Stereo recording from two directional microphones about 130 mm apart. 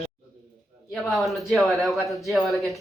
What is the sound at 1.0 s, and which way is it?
Speech, centre (ahead or behind).